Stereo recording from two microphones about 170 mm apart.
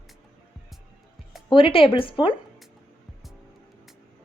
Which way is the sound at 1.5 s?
30° left (ahead or behind).